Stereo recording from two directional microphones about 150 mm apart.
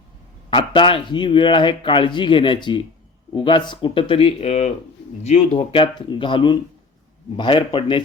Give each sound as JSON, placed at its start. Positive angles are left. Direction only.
{"t": 0.5, "sound": "a man's voice", "side_deg": 35}